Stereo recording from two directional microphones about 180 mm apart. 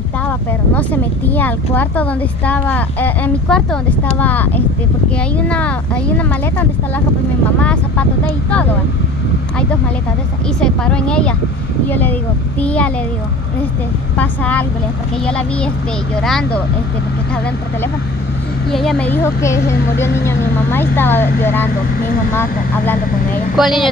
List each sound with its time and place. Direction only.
0.7 s speech: 10° left (ahead or behind)
10.6 s speech: 5° left (ahead or behind)
14.1 s speech: 10° left (ahead or behind)
18.7 s speech: centre (ahead or behind)
23.5 s speech: centre (ahead or behind)